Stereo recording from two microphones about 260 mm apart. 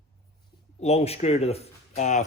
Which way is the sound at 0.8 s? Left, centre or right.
Left.